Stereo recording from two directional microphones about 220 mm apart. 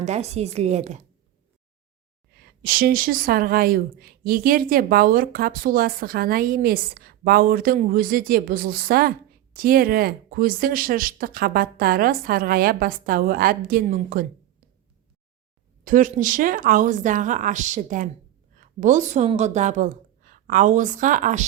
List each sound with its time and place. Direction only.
0.0 s a woman's voice: 30° right (ahead or behind)
2.4 s speech: 45° right (ahead or behind)
15.8 s a woman's voice: 35° right (ahead or behind)